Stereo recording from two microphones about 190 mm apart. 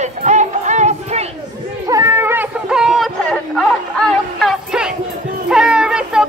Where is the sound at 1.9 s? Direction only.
15° right (ahead or behind).